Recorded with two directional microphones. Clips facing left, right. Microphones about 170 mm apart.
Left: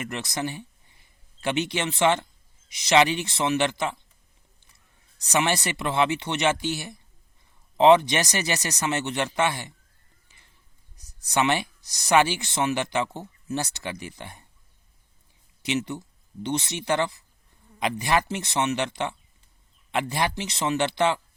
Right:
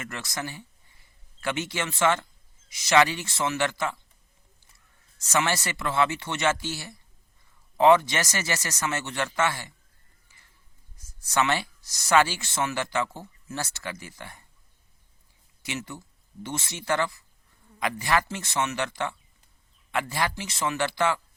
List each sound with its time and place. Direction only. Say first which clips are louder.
0.0 s speech: left 5 dB; 20° left (ahead or behind)
5.2 s speech: left 2 dB; 15° left (ahead or behind)
11.2 s speech: left 2 dB; 20° left (ahead or behind)
15.6 s speech: left 8 dB; 20° left (ahead or behind)